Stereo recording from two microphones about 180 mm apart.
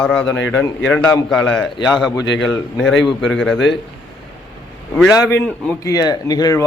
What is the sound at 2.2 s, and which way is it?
Speech, 90° left.